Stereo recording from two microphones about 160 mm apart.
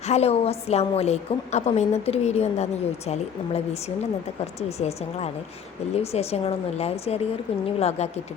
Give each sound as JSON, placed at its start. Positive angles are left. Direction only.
{"t": 0.1, "sound": "a woman's voice", "side_deg": 40}